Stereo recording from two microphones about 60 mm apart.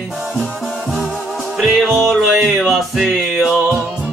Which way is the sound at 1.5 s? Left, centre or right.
Centre.